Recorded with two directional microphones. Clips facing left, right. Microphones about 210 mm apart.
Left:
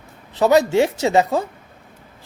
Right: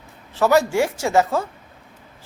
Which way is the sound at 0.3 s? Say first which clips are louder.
Left 2 dB; 20° left (ahead or behind).